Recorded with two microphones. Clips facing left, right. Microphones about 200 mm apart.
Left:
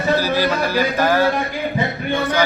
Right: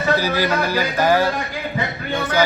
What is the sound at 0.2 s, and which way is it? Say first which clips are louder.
A man's voice: left 1 dB; 15° right (ahead or behind).